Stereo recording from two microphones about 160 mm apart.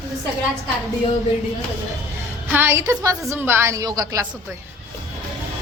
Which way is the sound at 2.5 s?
15° right (ahead or behind).